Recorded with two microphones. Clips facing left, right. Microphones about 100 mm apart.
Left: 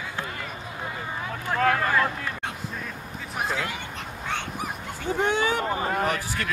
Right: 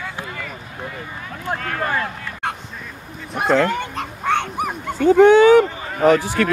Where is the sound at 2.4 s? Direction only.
60° right (ahead or behind).